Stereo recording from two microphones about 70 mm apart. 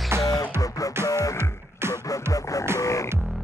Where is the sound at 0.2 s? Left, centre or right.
Left.